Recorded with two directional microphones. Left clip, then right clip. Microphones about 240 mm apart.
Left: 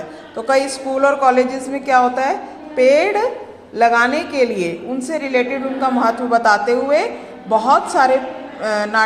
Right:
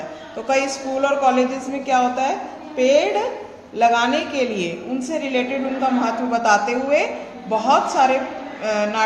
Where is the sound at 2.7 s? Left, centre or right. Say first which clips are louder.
Left 4 dB; centre.